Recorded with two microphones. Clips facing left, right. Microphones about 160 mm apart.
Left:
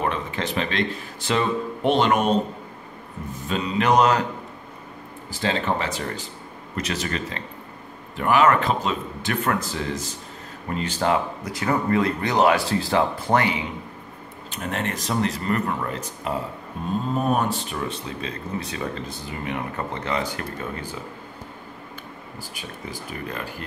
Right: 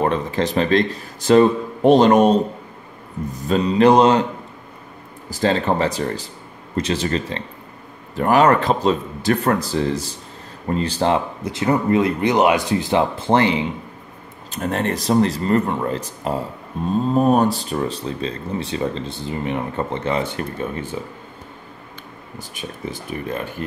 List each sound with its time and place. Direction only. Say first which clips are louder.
0.0 s speech: right 6 dB; 35° right (ahead or behind)
3.3 s speech: right 8 dB; 40° right (ahead or behind)
5.3 s speech: right 6 dB; 40° right (ahead or behind); by 21.0 s 25° right (ahead or behind)
22.4 s speech: right 7 dB; 20° right (ahead or behind)